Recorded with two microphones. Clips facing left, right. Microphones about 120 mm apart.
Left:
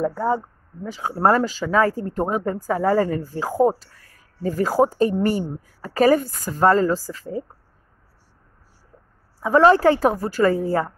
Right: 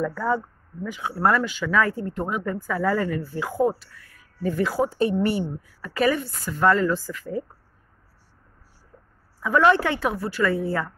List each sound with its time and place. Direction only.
0.0 s speech: 25° left (ahead or behind)
9.4 s speech: 30° left (ahead or behind)